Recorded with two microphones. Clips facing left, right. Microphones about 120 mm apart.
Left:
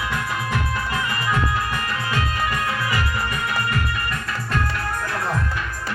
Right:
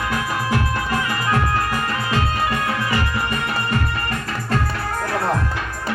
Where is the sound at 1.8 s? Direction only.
30° right (ahead or behind).